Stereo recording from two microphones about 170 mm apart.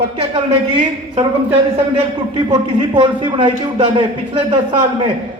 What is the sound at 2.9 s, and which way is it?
A man's voice, 25° right (ahead or behind).